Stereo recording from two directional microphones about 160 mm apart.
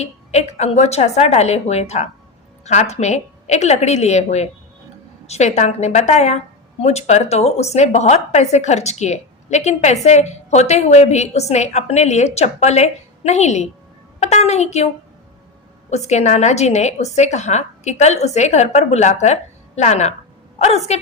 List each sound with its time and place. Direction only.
0.0 s speech: 45° left (ahead or behind)
14.2 s a sound: 45° left (ahead or behind)
15.9 s speech: 45° left (ahead or behind)